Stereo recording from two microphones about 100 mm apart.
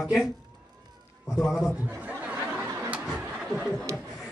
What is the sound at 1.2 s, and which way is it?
Speech, centre (ahead or behind).